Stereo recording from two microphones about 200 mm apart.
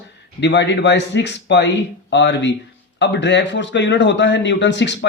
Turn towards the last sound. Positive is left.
turn(degrees=60)  # may be behind; listen again after turning